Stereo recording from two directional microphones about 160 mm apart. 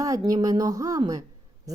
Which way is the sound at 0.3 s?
25° right (ahead or behind).